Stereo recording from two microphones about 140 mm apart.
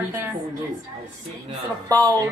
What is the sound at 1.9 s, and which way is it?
Speech, 25° right (ahead or behind).